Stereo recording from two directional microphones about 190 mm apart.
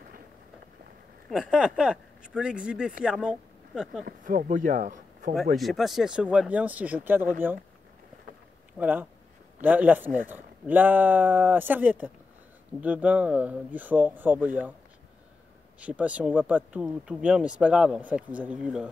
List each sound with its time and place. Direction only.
1.3 s speech: 5° right (ahead or behind)
4.0 s speech: 45° right (ahead or behind)
5.6 s speech: centre (ahead or behind)
8.7 s speech: 10° right (ahead or behind)
15.8 s speech: 5° right (ahead or behind)